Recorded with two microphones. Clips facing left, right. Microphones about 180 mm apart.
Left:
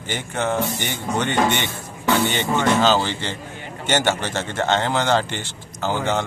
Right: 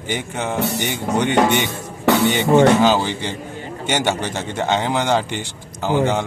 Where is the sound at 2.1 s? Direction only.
70° right (ahead or behind).